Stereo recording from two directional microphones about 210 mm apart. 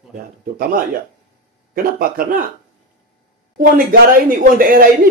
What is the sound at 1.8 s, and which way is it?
Speech, 45° right (ahead or behind).